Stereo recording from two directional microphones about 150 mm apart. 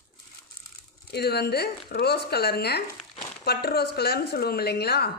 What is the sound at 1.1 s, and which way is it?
Speech, 90° left.